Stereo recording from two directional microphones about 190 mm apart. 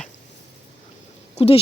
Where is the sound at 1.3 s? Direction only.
30° left (ahead or behind).